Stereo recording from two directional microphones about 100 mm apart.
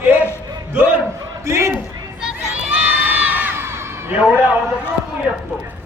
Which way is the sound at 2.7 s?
15° right (ahead or behind).